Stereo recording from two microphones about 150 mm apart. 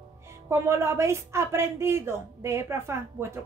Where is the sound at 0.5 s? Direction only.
20° right (ahead or behind).